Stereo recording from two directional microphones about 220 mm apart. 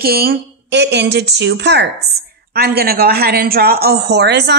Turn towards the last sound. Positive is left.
turn(degrees=-50)  # may be behind; listen again after turning